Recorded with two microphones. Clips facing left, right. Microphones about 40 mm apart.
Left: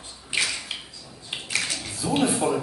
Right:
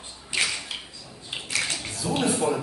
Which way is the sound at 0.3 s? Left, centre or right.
Left.